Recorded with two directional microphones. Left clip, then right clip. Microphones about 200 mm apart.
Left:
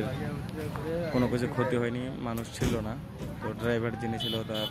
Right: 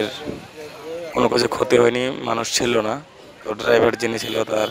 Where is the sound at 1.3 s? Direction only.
50° right (ahead or behind).